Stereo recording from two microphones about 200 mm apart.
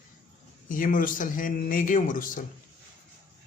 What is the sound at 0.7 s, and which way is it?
A man's voice, 40° left (ahead or behind).